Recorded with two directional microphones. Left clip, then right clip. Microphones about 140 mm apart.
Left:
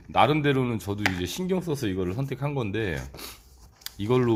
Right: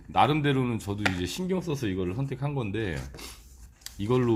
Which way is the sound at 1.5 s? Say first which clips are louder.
Left 3 dB; 35° left (ahead or behind).